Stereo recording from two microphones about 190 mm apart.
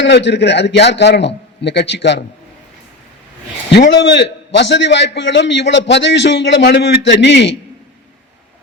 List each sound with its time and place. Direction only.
0.0 s a man's voice: 65° left (ahead or behind)
3.7 s a man's voice: 65° left (ahead or behind)